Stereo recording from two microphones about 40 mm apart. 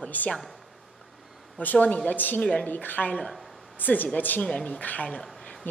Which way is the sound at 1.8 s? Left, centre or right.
Left.